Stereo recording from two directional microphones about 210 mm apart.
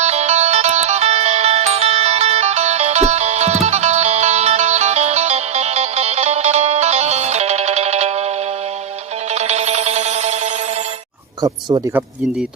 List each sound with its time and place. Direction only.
0.0 s music: 30° right (ahead or behind)
9.3 s music: 30° right (ahead or behind)